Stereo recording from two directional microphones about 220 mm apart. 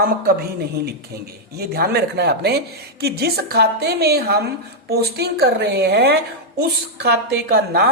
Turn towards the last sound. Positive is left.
turn(degrees=-50)  # may be behind; listen again after turning